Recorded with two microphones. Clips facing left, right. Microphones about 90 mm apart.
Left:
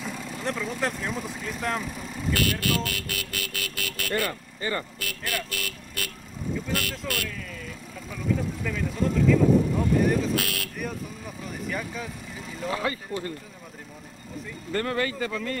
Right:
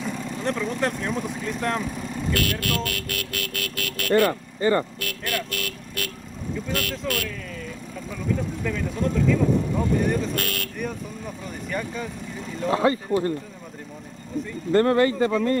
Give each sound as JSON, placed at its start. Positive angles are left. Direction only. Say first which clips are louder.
{"t": 0.0, "sound": "speech", "louder": "right 4 dB", "side_deg": 0}
{"t": 4.3, "sound": "speech", "louder": "right 9 dB", "side_deg": -35}
{"t": 5.0, "sound": "speech", "louder": "right 3 dB", "side_deg": 0}
{"t": 12.7, "sound": "speech", "louder": "right 10 dB", "side_deg": -30}
{"t": 14.7, "sound": "speech", "louder": "right 9 dB", "side_deg": -30}